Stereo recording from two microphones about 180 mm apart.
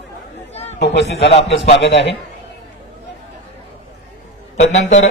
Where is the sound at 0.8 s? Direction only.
75° left (ahead or behind).